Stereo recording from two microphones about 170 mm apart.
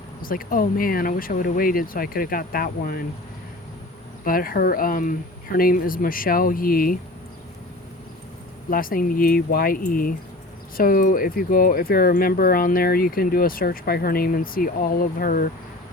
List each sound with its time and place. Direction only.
0.2 s speech: 55° left (ahead or behind)
4.2 s speech: 55° left (ahead or behind)
8.7 s speech: 55° left (ahead or behind)